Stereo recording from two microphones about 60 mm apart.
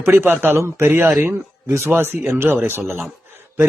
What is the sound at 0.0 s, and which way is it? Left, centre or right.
A man's voice, right.